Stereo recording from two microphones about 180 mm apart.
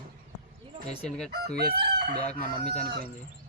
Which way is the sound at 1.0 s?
5° left (ahead or behind).